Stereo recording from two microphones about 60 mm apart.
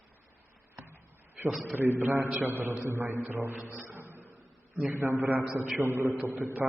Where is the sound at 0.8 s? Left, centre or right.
Right.